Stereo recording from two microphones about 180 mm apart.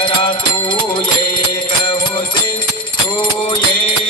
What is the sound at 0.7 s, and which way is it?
Music, 25° left (ahead or behind).